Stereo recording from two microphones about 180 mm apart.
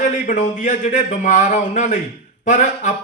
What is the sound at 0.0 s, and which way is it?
Speech, 45° left (ahead or behind).